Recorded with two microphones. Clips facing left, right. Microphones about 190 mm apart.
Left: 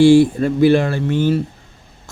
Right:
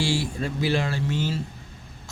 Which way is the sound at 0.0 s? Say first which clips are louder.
Left 16 dB; 55° left (ahead or behind).